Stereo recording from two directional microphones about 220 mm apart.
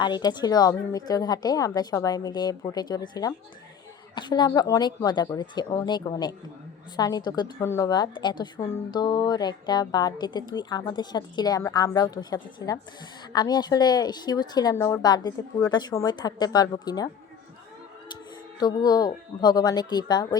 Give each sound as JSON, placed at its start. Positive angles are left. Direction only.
{"t": 0.0, "sound": "a woman's voice", "side_deg": 20}
{"t": 18.6, "sound": "a woman's voice", "side_deg": 15}